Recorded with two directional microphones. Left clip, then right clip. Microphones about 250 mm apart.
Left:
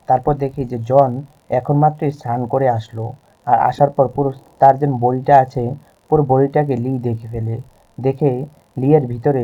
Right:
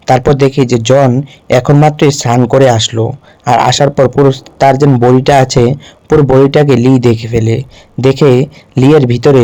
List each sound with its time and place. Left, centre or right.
0.0 s a man's voice: right